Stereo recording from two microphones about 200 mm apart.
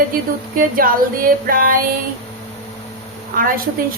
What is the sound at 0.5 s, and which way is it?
A woman's voice, 45° right (ahead or behind).